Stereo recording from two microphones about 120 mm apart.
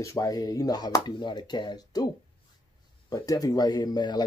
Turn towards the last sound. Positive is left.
turn(degrees=35)  # may be behind; listen again after turning